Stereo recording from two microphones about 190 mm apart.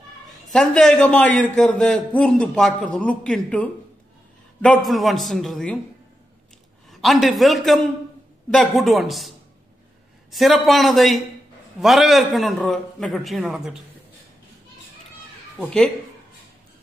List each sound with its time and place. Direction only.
0.3 s a man's voice: 5° left (ahead or behind)
6.9 s a man's voice: centre (ahead or behind)
10.3 s a man's voice: centre (ahead or behind)
15.6 s a man's voice: 5° left (ahead or behind)